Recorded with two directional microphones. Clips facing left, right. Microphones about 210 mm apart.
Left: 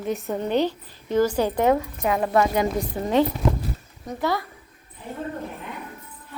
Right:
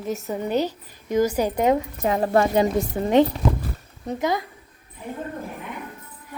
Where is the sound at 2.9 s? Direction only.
20° right (ahead or behind).